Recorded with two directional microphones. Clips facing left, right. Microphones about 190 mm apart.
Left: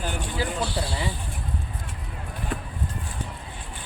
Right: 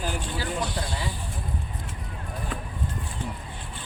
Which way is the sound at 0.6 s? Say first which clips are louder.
Left 2 dB; 30° left (ahead or behind).